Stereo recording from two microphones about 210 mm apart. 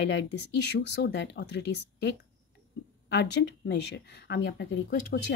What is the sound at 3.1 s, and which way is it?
Speech, 55° left (ahead or behind).